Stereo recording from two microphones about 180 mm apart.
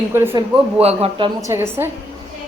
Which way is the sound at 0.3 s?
35° right (ahead or behind).